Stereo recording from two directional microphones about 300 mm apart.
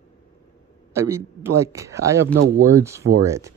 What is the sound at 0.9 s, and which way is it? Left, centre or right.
Speech, centre.